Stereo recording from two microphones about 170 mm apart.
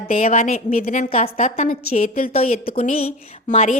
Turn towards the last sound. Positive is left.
turn(degrees=40)  # may be behind; listen again after turning